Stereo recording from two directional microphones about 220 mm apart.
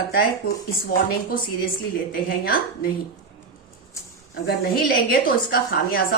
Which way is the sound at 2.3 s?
40° left (ahead or behind).